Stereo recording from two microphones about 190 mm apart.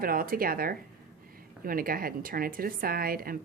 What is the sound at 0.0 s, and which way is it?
A woman's voice, 50° right (ahead or behind).